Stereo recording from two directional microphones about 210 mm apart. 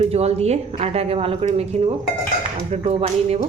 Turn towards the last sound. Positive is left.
turn(degrees=-30)  # may be behind; listen again after turning